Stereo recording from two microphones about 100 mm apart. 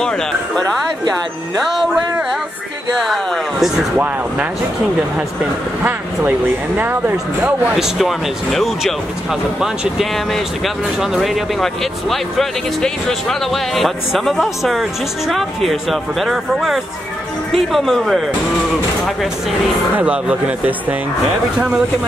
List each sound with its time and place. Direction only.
1.6 s speech: centre (ahead or behind)
3.0 s speech: centre (ahead or behind)
6.8 s speech: 20° right (ahead or behind)
7.7 s speech: centre (ahead or behind)
20.0 s speech: 15° right (ahead or behind)